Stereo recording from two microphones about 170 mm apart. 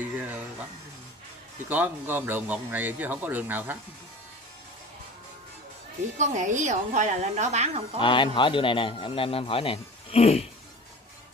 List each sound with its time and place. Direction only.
0.0 s a sound: 10° right (ahead or behind)
1.7 s speech: 10° right (ahead or behind)
6.1 s a woman's voice: 45° right (ahead or behind)
8.0 s a man's voice: 30° left (ahead or behind)